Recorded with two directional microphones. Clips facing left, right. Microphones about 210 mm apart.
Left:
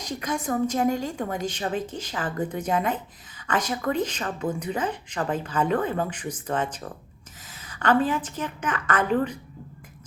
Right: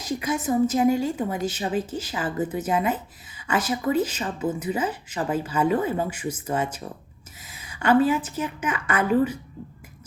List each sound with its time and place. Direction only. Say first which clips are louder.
0.0 s a woman's voice: right 3 dB; 5° right (ahead or behind)